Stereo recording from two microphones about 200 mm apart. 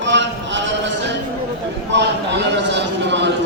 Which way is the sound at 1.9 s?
60° right (ahead or behind).